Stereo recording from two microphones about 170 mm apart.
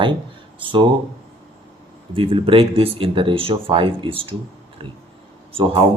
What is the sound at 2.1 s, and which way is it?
Speech, 30° right (ahead or behind).